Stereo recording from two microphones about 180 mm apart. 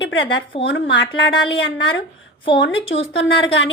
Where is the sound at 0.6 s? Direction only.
90° left.